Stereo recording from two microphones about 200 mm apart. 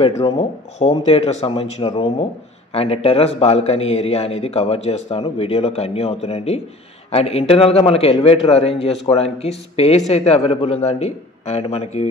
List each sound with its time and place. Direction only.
0.0 s a man's voice: 30° left (ahead or behind)